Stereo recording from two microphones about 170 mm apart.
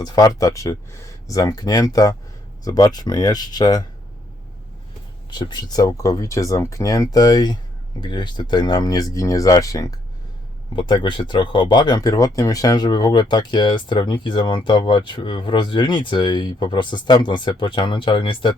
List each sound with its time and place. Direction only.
0.0 s speech: 20° left (ahead or behind)
5.3 s speech: 25° left (ahead or behind)